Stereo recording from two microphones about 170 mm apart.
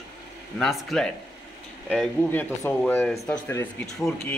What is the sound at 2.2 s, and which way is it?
Speech, 10° left (ahead or behind).